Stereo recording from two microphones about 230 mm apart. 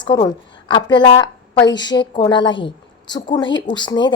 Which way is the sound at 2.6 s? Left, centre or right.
Centre.